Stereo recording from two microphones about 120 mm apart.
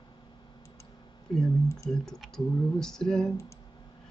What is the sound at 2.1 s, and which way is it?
Typing, 5° left (ahead or behind).